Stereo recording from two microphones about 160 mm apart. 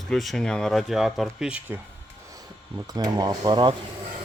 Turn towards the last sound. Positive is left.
turn(degrees=-30)  # may be behind; listen again after turning